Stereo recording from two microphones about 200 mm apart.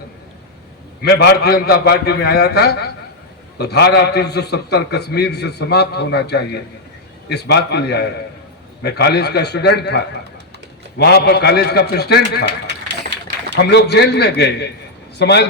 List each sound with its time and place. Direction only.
1.0 s a man's voice: 55° left (ahead or behind)
13.6 s a man's voice: 55° left (ahead or behind)